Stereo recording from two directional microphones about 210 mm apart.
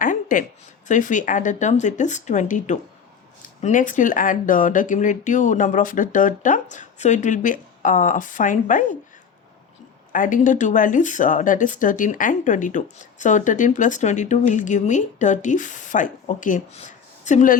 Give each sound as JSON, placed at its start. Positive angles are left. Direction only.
{"t": 0.0, "sound": "a sound", "side_deg": 40}
{"t": 0.9, "sound": "speech", "side_deg": 35}
{"t": 10.1, "sound": "speech", "side_deg": 40}